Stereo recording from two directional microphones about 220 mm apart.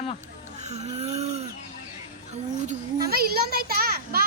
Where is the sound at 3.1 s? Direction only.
45° right (ahead or behind).